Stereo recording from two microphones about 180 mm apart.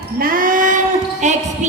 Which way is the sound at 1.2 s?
40° right (ahead or behind).